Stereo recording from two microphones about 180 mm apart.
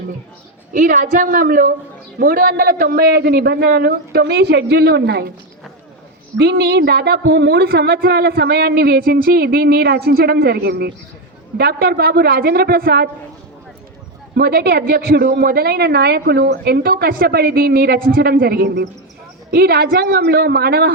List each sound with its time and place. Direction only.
0.7 s a woman's voice: 50° right (ahead or behind); by 5.3 s 65° right (ahead or behind)
6.3 s speech: 70° right (ahead or behind)
14.3 s speech: 60° right (ahead or behind)